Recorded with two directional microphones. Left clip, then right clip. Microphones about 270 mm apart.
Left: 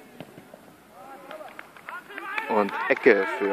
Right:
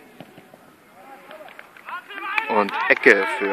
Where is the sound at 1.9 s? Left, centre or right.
Right.